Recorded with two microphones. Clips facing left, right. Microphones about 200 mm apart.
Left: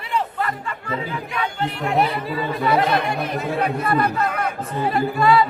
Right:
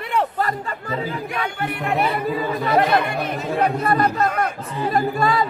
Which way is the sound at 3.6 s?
40° right (ahead or behind).